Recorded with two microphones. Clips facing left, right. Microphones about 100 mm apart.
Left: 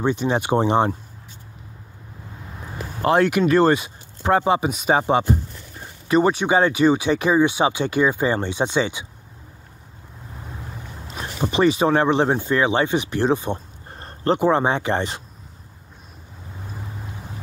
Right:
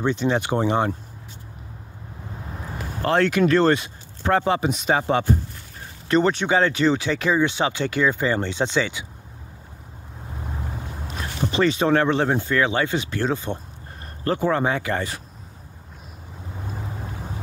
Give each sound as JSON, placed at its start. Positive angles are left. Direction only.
{"t": 0.0, "sound": "speech", "side_deg": 15}
{"t": 3.0, "sound": "speech", "side_deg": 15}
{"t": 11.1, "sound": "speech", "side_deg": 15}
{"t": 13.9, "sound": "a sound", "side_deg": 30}
{"t": 14.4, "sound": "speech", "side_deg": 20}